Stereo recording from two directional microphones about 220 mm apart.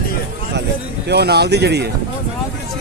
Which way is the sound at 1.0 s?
50° right (ahead or behind).